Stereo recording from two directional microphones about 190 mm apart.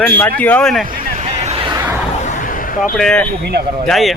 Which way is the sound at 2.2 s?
45° left (ahead or behind).